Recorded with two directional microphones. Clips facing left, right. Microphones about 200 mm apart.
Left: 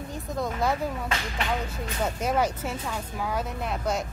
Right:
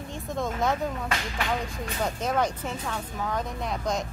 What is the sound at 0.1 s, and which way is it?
Speech, 5° left (ahead or behind).